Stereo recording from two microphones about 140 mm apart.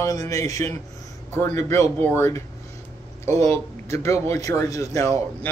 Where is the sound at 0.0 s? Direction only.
25° left (ahead or behind).